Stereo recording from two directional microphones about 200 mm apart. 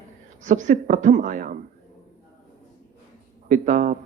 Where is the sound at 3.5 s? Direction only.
40° right (ahead or behind).